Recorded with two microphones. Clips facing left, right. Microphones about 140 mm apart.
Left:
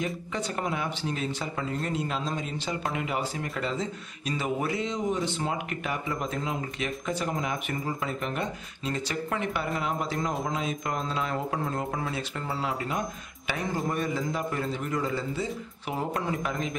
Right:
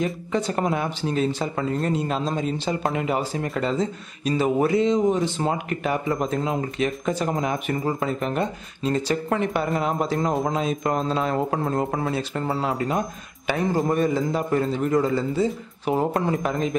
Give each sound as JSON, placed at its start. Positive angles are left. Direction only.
{"t": 0.3, "sound": "a man's voice", "side_deg": -40}